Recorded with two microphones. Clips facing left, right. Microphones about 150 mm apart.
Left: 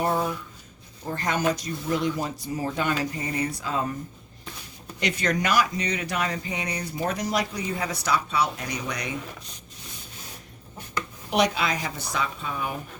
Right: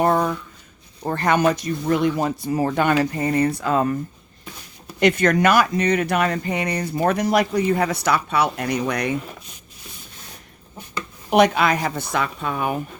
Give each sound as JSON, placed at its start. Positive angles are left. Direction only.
{"t": 0.0, "sound": "a sound", "side_deg": -65}
{"t": 1.0, "sound": "speech", "side_deg": -65}
{"t": 4.9, "sound": "speech", "side_deg": -55}
{"t": 11.3, "sound": "speech", "side_deg": -55}